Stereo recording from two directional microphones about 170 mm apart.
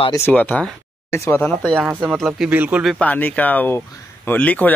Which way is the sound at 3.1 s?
10° left (ahead or behind).